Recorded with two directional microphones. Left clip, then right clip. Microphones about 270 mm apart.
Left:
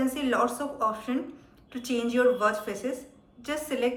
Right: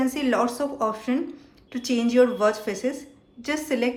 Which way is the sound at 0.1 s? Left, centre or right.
Centre.